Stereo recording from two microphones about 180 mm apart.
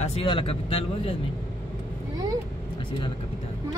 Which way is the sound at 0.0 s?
35° left (ahead or behind).